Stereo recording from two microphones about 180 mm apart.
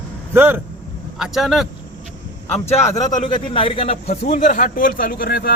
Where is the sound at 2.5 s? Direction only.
40° left (ahead or behind).